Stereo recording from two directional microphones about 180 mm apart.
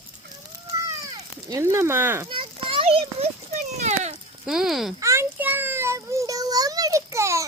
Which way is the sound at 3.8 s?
40° right (ahead or behind).